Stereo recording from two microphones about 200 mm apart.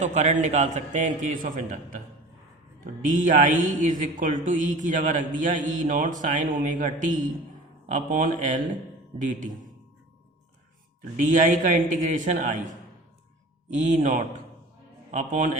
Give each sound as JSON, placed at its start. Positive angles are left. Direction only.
{"t": 0.0, "sound": "speech", "side_deg": -35}
{"t": 11.3, "sound": "speech", "side_deg": -40}
{"t": 13.7, "sound": "speech", "side_deg": -35}